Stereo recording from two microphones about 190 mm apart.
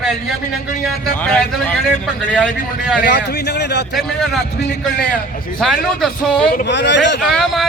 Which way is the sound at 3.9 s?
Centre (ahead or behind).